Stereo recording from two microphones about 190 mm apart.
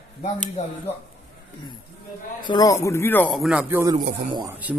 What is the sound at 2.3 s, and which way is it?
Speech, 20° left (ahead or behind).